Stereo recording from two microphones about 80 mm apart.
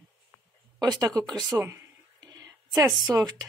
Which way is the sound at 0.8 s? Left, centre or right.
Right.